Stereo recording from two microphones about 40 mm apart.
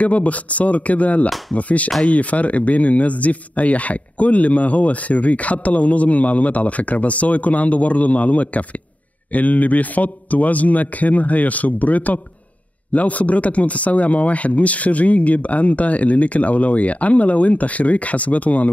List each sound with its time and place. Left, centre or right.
0.0 s speech: left